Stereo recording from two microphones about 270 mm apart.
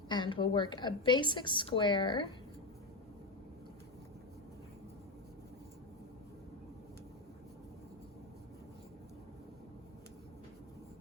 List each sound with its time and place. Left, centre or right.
0.1 s a woman's voice: centre